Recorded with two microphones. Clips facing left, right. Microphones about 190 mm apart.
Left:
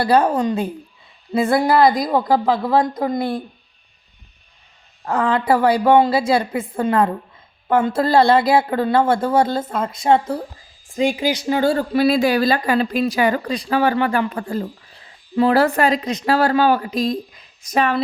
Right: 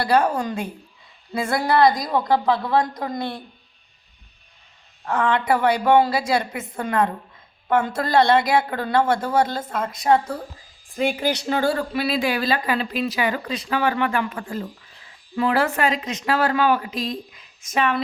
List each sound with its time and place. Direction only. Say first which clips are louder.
0.0 s speech: left 4 dB; 30° left (ahead or behind)
5.0 s speech: left 3 dB; 35° left (ahead or behind)
10.9 s speech: left 3 dB; 15° left (ahead or behind)
11.8 s speech: left 7 dB; 45° left (ahead or behind)